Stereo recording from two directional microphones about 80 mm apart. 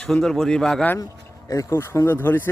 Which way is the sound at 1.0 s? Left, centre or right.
Left.